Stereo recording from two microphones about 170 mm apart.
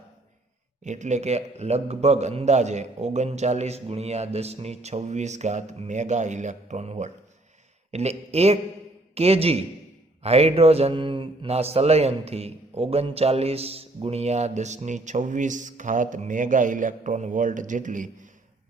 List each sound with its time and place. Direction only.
0.9 s a man's voice: 45° right (ahead or behind)